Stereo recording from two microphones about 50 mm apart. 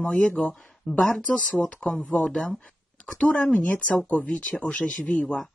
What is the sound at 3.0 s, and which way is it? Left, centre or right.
Speech, left.